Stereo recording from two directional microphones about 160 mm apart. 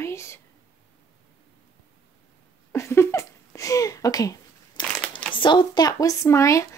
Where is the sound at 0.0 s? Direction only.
15° left (ahead or behind).